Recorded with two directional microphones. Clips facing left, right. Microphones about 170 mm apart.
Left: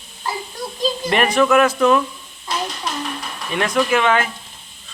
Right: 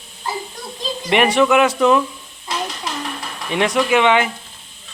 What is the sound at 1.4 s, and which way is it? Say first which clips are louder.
Speech: left 2 dB; 15° right (ahead or behind).